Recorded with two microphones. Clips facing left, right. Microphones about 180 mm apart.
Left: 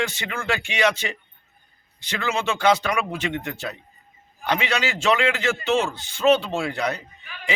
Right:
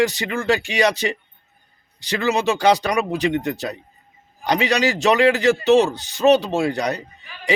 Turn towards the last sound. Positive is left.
turn(degrees=-40)  # may be behind; listen again after turning